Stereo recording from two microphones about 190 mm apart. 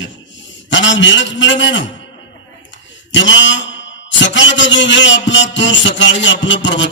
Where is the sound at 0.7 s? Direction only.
75° left (ahead or behind).